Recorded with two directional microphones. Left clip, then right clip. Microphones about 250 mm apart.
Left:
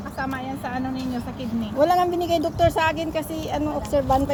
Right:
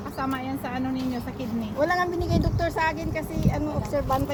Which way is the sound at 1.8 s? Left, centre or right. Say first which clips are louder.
Left 5 dB; left.